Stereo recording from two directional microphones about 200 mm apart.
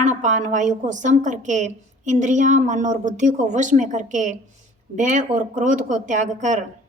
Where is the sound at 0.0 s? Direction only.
40° right (ahead or behind).